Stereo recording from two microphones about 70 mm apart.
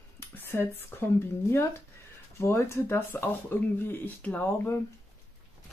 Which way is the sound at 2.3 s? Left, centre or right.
Left.